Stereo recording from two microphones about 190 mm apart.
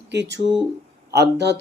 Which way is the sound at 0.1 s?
65° right (ahead or behind).